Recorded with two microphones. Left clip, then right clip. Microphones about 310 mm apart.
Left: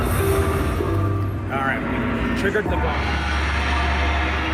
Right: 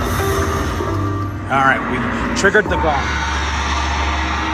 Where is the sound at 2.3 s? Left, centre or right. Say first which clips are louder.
Right 10 dB; centre.